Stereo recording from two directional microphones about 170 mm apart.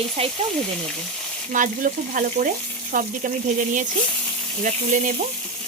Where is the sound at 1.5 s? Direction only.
50° right (ahead or behind).